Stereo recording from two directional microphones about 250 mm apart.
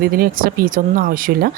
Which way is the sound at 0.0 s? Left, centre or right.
Right.